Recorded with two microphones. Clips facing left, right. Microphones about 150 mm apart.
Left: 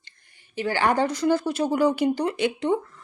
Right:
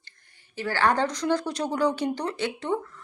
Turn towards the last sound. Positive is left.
turn(degrees=15)  # may be behind; listen again after turning